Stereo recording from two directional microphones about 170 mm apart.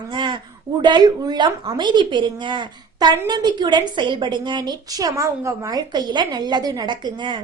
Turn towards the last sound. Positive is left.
turn(degrees=-25)  # may be behind; listen again after turning